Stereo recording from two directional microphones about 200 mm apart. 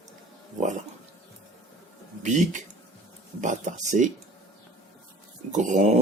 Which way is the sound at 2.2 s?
35° right (ahead or behind).